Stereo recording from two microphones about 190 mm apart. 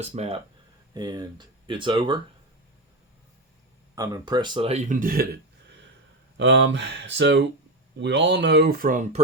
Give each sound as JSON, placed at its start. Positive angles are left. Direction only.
{"t": 0.1, "sound": "speech", "side_deg": -30}
{"t": 3.9, "sound": "speech", "side_deg": -20}
{"t": 6.3, "sound": "speech", "side_deg": -75}